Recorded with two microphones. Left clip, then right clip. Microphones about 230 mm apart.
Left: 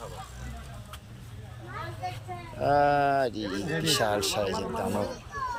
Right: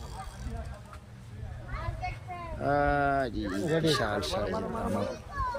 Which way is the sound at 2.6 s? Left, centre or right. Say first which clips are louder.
Left 4 dB; centre.